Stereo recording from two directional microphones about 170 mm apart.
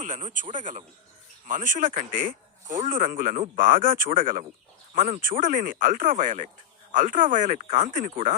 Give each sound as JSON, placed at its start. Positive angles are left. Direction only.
{"t": 0.0, "sound": "speech", "side_deg": -45}